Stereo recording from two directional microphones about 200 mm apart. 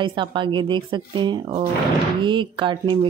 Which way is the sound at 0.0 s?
25° right (ahead or behind).